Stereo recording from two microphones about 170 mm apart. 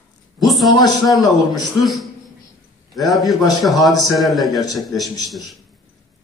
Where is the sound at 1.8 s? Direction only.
Centre (ahead or behind).